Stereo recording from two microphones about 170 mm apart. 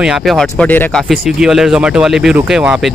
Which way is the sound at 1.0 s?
Centre (ahead or behind).